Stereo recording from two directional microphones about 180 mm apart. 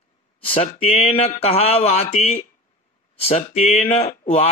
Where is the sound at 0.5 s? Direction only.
35° left (ahead or behind).